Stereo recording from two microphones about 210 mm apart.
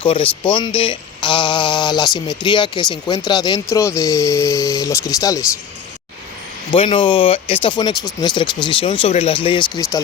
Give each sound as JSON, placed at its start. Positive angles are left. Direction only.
{"t": 0.0, "sound": "speech", "side_deg": 25}
{"t": 6.7, "sound": "speech", "side_deg": 25}